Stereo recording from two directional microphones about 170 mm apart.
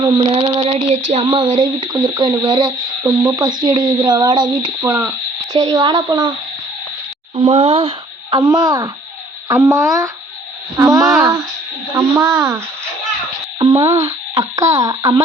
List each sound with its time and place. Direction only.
0.0 s female singing: 35° right (ahead or behind)
4.9 s speech: 10° right (ahead or behind)
5.5 s female singing: 20° right (ahead or behind)
7.3 s speech: 35° right (ahead or behind); by 8.9 s 20° right (ahead or behind)
10.8 s speech: 20° right (ahead or behind)
11.1 s female singing: 20° right (ahead or behind)
11.9 s speech: 15° right (ahead or behind)
13.6 s female singing: 25° right (ahead or behind)